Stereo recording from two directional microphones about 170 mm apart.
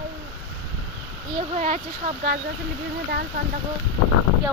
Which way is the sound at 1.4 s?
40° right (ahead or behind).